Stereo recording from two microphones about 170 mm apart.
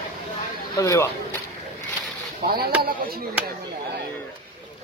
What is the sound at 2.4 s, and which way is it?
Speech, 65° right (ahead or behind).